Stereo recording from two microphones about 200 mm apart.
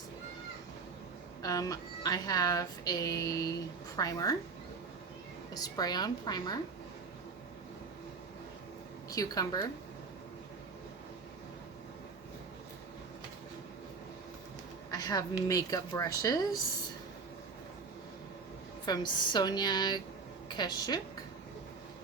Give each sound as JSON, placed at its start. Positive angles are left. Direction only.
{"t": 1.4, "sound": "a woman's voice", "side_deg": 15}
{"t": 5.5, "sound": "a woman's voice", "side_deg": 20}
{"t": 9.0, "sound": "a woman's voice", "side_deg": 20}
{"t": 14.8, "sound": "speech", "side_deg": 20}
{"t": 18.9, "sound": "a woman's voice", "side_deg": 20}